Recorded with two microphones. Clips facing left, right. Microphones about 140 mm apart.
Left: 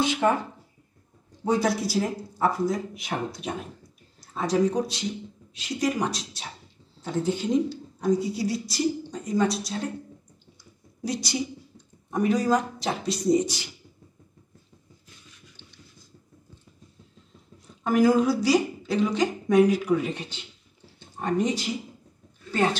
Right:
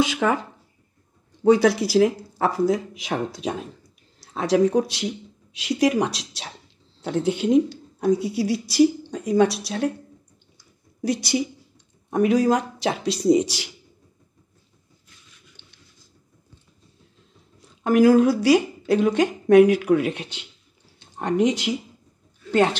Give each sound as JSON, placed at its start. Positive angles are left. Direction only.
{"t": 0.0, "sound": "speech", "side_deg": -90}
{"t": 1.4, "sound": "speech", "side_deg": -80}
{"t": 5.5, "sound": "speech", "side_deg": -90}
{"t": 7.0, "sound": "speech", "side_deg": -70}
{"t": 11.1, "sound": "speech", "side_deg": -60}
{"t": 12.1, "sound": "speech", "side_deg": -70}
{"t": 17.8, "sound": "speech", "side_deg": -65}
{"t": 19.7, "sound": "speech", "side_deg": -70}
{"t": 21.2, "sound": "speech", "side_deg": -80}